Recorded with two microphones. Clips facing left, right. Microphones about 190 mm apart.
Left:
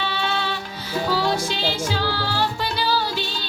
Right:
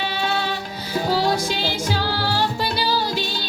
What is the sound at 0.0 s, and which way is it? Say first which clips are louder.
Music: right 1 dB; 40° right (ahead or behind).